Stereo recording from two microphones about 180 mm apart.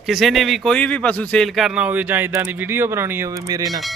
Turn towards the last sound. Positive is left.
turn(degrees=-20)  # may be behind; listen again after turning